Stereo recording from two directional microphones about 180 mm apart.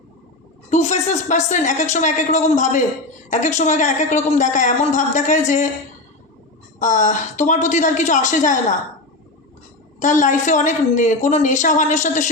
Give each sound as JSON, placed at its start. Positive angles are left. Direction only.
{"t": 0.7, "sound": "speech", "side_deg": 40}
{"t": 6.7, "sound": "speech", "side_deg": 45}
{"t": 10.0, "sound": "speech", "side_deg": 45}